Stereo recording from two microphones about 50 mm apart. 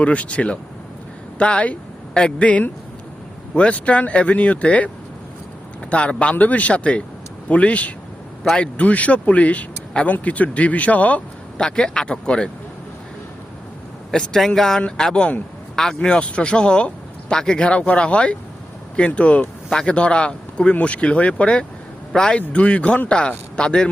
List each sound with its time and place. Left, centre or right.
0.0 s speech: left
5.9 s speech: left
8.9 s speech: left
11.5 s speech: centre
14.1 s speech: centre
14.8 s a man's voice: left
22.4 s speech: left